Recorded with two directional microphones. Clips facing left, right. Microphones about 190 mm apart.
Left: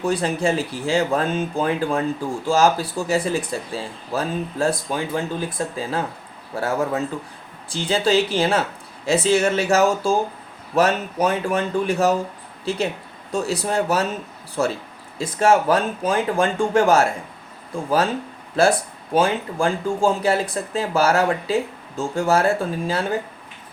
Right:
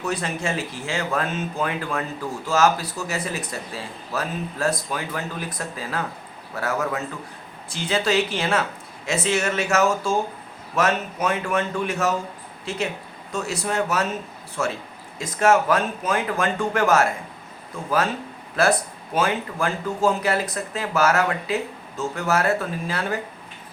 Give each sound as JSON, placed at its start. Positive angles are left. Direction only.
{"t": 0.0, "sound": "speech", "side_deg": 30}